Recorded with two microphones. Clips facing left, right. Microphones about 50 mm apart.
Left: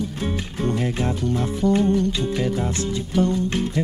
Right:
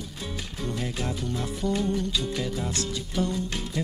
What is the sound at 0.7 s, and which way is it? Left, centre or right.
Speech, left.